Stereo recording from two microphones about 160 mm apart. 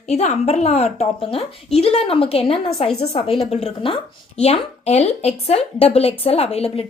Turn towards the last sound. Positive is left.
turn(degrees=40)  # may be behind; listen again after turning